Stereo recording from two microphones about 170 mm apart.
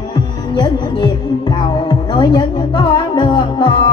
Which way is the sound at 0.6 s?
25° left (ahead or behind).